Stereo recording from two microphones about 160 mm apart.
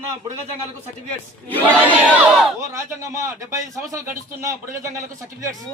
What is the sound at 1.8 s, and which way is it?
Speech, 10° right (ahead or behind).